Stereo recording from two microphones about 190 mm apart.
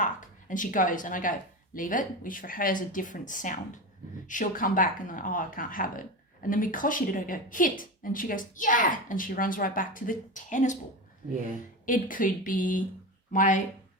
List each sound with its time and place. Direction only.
0.0 s a woman's voice: 45° left (ahead or behind)
11.9 s a woman's voice: 45° left (ahead or behind)